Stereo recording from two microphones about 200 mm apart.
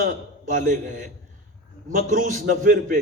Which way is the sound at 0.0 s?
40° right (ahead or behind).